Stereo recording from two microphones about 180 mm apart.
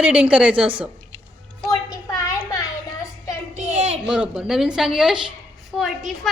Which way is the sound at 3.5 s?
40° right (ahead or behind).